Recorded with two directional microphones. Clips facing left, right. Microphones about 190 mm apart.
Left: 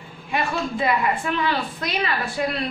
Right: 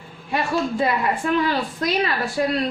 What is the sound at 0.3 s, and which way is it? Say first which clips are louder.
A woman's voice: right 2 dB; 40° right (ahead or behind).